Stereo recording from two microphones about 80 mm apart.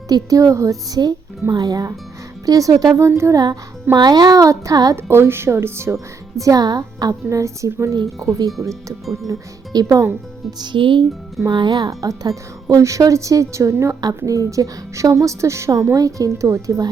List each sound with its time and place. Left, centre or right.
0.1 s a woman's voice: right
1.5 s a woman's voice: right
3.3 s a woman's voice: right
3.9 s a woman's voice: right
4.9 s a woman's voice: right
7.1 s a woman's voice: right
10.6 s speech: right
11.5 s speech: right
11.9 s a woman's voice: right